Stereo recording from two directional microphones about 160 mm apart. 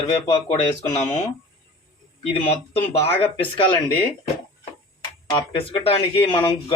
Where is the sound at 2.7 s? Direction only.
35° left (ahead or behind).